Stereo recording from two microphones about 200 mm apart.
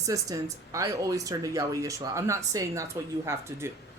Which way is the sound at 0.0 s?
15° right (ahead or behind).